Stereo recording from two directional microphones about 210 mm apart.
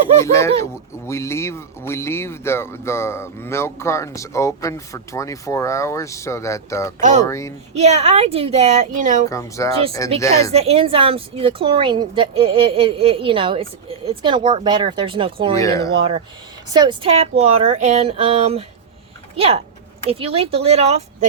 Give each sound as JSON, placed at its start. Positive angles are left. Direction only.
{"t": 0.2, "sound": "speech", "side_deg": 15}
{"t": 7.0, "sound": "speech", "side_deg": -35}
{"t": 7.3, "sound": "speech", "side_deg": 15}
{"t": 7.8, "sound": "speech", "side_deg": -30}
{"t": 9.3, "sound": "speech", "side_deg": 15}
{"t": 10.5, "sound": "a woman's voice", "side_deg": -30}
{"t": 15.5, "sound": "speech", "side_deg": 15}
{"t": 16.7, "sound": "a woman's voice", "side_deg": -20}